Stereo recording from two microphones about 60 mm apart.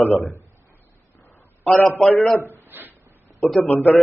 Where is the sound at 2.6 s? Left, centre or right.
Right.